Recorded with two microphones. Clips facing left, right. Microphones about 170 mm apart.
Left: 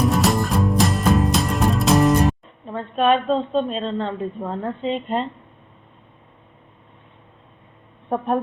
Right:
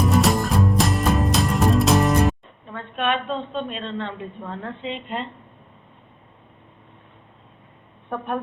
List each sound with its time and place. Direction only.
0.1 s music: centre (ahead or behind)
2.6 s a woman's voice: 35° left (ahead or behind)